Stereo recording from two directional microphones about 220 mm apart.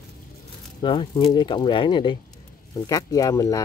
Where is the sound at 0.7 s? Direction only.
20° left (ahead or behind).